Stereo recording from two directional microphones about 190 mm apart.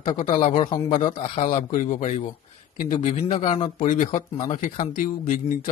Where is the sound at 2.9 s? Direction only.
25° left (ahead or behind).